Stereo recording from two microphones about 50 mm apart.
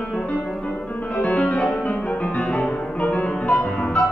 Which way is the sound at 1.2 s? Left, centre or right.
Left.